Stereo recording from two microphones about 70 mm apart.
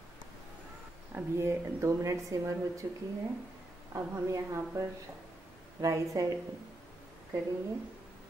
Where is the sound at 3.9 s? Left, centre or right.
Right.